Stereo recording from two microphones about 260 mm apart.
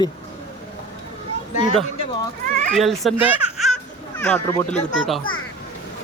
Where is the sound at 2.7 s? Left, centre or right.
Centre.